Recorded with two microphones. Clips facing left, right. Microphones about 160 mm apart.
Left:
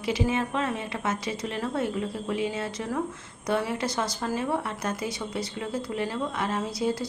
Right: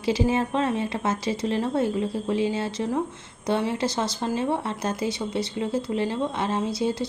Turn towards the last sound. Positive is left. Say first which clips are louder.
# right 3 dB
turn(degrees=-25)  # may be behind; listen again after turning